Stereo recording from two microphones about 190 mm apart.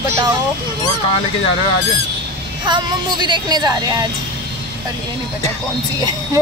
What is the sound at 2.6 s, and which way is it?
Speech, 25° right (ahead or behind).